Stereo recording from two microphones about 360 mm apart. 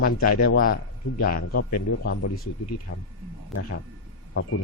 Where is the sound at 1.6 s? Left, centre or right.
Left.